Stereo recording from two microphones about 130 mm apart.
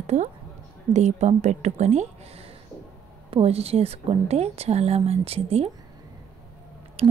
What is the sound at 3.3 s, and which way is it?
A woman's voice, 50° right (ahead or behind).